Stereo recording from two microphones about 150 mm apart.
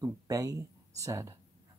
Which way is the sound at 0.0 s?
25° right (ahead or behind).